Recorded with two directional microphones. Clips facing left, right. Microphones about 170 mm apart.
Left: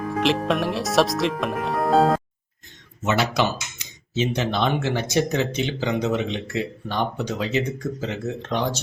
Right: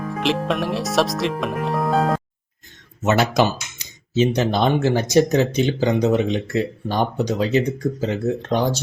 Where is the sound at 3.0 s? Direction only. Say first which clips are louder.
Right 4 dB; 45° right (ahead or behind).